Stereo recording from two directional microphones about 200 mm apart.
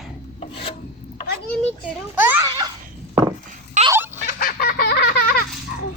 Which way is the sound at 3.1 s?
15° right (ahead or behind).